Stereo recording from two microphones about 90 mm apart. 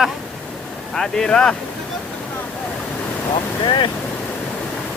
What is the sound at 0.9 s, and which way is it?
Speech, 5° left (ahead or behind).